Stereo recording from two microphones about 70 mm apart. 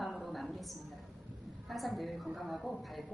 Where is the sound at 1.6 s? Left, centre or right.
Centre.